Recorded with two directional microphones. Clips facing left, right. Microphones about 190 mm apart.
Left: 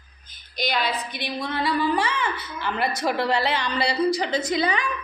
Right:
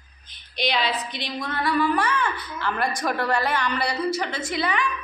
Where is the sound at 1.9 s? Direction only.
15° left (ahead or behind).